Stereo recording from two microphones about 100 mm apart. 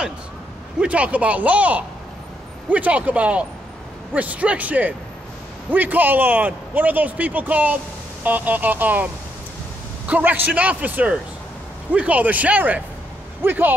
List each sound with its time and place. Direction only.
0.7 s a man's voice: 15° right (ahead or behind)